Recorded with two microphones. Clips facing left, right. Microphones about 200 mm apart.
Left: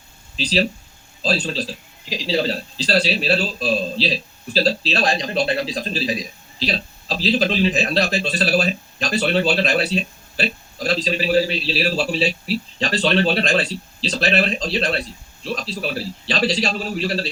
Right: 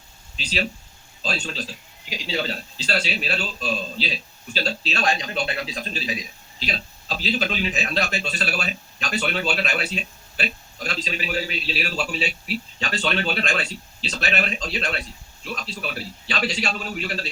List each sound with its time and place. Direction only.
0.3 s speech: 35° left (ahead or behind)